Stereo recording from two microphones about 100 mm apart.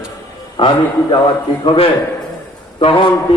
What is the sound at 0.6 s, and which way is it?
A man's voice, 65° left (ahead or behind).